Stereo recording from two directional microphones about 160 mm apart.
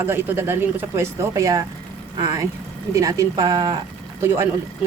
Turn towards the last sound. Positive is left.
turn(degrees=-15)  # may be behind; listen again after turning